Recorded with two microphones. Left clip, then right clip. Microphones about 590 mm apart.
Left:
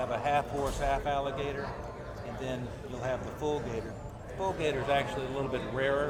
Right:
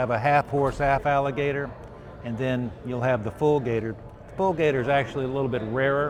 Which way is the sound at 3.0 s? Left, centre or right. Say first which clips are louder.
Right 10 dB; right.